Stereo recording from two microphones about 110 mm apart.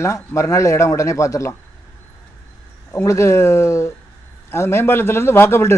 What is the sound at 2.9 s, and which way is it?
Speech, 25° left (ahead or behind).